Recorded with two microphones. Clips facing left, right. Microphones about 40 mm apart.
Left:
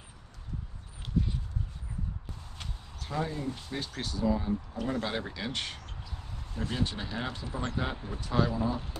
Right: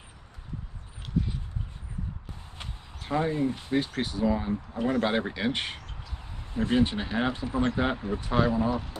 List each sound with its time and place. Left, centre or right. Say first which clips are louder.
2.6 s speech: right 3 dB; right